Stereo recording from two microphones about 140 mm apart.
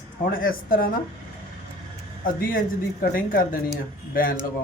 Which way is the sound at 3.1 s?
85° left.